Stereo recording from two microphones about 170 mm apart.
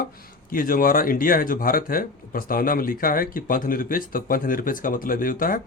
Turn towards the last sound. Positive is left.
turn(degrees=55)  # may be behind; listen again after turning